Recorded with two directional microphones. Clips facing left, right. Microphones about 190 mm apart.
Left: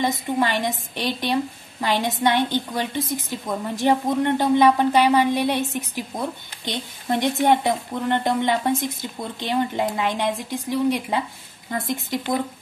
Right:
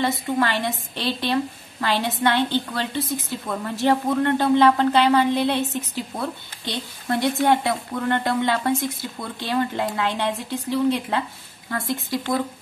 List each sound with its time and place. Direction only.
0.0 s a woman's voice: 15° left (ahead or behind)